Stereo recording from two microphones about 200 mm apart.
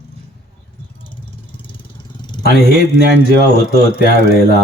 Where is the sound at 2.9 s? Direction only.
55° right (ahead or behind).